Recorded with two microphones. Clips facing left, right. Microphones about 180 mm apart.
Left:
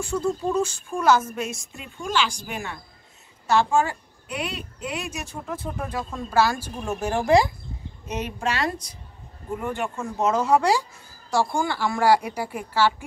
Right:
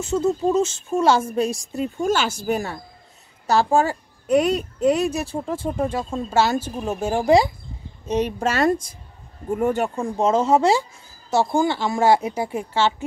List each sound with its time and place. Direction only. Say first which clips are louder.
0.0 s a woman's voice: right 5 dB; 25° right (ahead or behind)
8.0 s a woman's voice: right 7 dB; 30° right (ahead or behind)